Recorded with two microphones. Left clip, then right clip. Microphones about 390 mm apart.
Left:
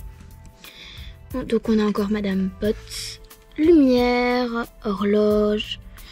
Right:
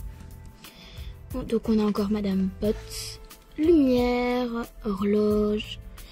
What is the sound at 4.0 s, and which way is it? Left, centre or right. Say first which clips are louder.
Speech: left 5 dB; left.